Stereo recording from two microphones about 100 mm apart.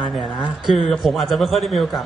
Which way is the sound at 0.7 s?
Centre (ahead or behind).